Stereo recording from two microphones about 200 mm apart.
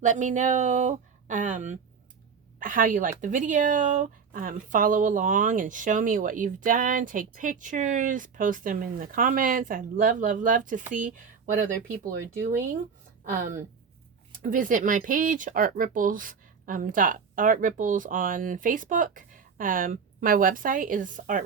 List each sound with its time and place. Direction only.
0.0 s speech: 40° right (ahead or behind)
13.3 s speech: 45° right (ahead or behind)